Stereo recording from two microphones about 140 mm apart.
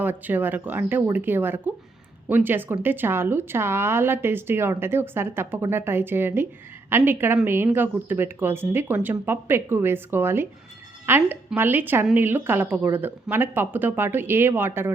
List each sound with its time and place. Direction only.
0.0 s speech: 15° right (ahead or behind)